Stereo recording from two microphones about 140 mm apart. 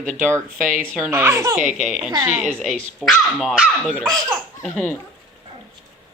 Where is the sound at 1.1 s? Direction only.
20° right (ahead or behind).